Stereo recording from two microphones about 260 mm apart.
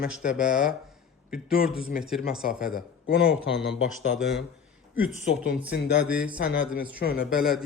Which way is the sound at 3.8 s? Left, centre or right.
Left.